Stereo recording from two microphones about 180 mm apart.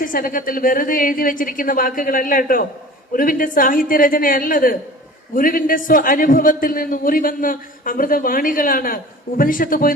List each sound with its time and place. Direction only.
0.0 s a man's voice: 50° left (ahead or behind)